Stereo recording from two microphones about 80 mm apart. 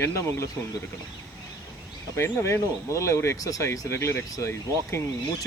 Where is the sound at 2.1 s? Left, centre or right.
Left.